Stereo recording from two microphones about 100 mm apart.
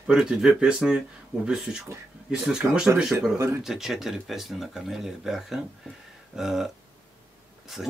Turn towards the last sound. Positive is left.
turn(degrees=0)  # may be behind; listen again after turning